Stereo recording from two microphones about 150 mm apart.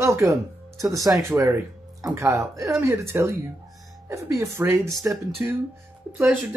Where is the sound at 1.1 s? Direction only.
20° right (ahead or behind).